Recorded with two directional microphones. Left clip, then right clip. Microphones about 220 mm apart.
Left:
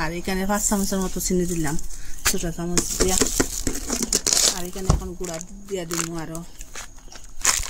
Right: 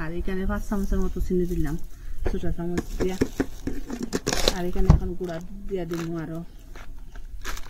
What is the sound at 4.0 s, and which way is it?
Crumpling, 50° left (ahead or behind).